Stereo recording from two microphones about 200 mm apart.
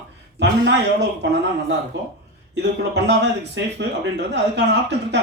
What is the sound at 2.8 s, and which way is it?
A man's voice, 60° right (ahead or behind).